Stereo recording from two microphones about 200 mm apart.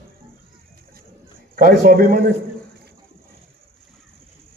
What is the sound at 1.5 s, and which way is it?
Speech, 45° right (ahead or behind).